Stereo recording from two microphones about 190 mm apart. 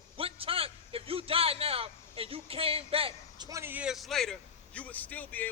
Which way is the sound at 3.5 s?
15° right (ahead or behind).